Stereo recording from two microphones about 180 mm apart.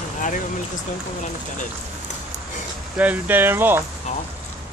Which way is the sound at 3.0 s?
10° right (ahead or behind).